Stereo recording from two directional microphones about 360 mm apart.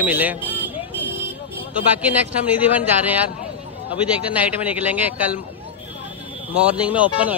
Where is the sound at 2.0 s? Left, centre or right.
Centre.